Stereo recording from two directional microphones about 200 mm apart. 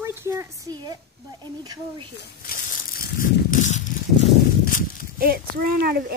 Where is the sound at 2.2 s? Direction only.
45° left (ahead or behind).